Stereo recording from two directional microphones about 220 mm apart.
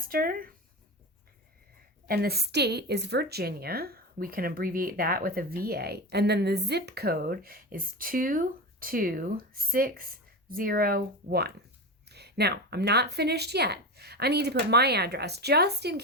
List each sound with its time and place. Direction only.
0.0 s speech: 40° right (ahead or behind)
2.0 s a woman's voice: 45° right (ahead or behind)